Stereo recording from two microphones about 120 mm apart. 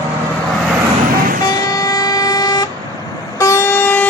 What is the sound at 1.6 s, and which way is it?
Vehicle, 30° left (ahead or behind).